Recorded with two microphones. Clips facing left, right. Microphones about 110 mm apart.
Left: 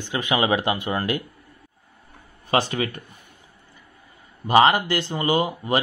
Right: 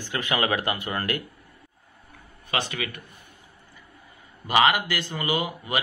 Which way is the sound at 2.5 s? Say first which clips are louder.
Left 7 dB; 35° left (ahead or behind).